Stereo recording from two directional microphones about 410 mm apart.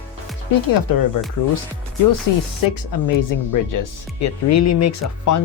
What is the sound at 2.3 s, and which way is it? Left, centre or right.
Speech, left.